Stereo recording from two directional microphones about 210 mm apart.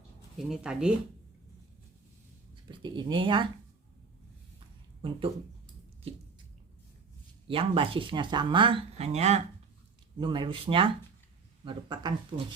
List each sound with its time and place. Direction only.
0.3 s speech: 5° right (ahead or behind)
2.6 s speech: 20° right (ahead or behind)
7.4 s speech: 25° right (ahead or behind)